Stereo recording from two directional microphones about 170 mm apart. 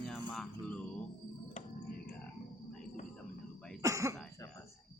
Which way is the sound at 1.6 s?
45° left (ahead or behind).